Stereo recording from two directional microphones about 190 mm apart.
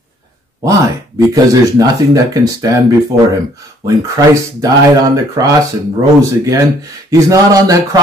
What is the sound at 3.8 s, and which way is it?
Speech, 15° right (ahead or behind).